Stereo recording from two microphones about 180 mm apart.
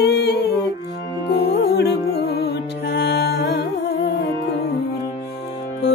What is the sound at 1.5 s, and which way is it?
Music, 65° left (ahead or behind).